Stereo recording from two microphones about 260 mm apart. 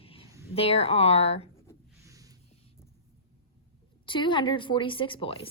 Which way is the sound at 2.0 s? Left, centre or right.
Centre.